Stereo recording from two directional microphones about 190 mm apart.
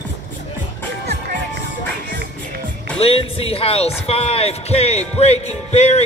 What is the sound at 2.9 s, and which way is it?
Speech, 30° left (ahead or behind).